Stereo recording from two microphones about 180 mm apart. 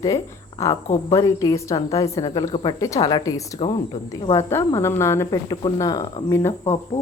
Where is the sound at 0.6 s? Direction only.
15° left (ahead or behind).